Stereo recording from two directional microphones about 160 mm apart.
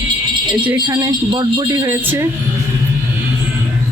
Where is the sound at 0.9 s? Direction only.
25° right (ahead or behind).